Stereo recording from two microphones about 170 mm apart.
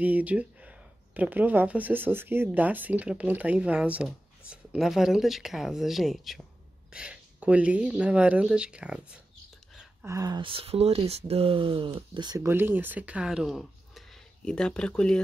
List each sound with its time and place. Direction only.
0.0 s speech: 10° right (ahead or behind)
10.0 s speech: 20° right (ahead or behind)
12.4 s speech: 10° right (ahead or behind); by 15.2 s 5° left (ahead or behind)